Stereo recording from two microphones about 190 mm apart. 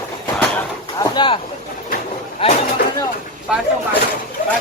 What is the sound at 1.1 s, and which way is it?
Boat, 25° left (ahead or behind).